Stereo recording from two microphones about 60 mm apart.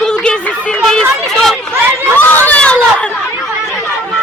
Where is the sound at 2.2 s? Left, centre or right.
Left.